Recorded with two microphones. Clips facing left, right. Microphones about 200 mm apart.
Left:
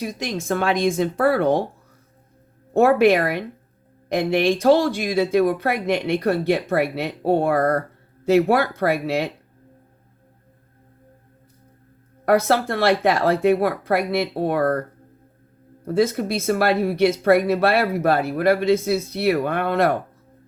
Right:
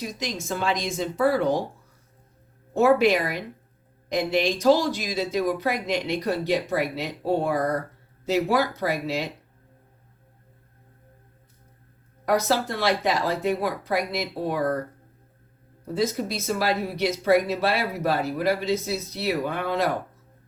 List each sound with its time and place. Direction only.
0.0 s speech: 60° left (ahead or behind)
2.7 s speech: 60° left (ahead or behind)
12.2 s speech: 60° left (ahead or behind)
15.9 s speech: 60° left (ahead or behind)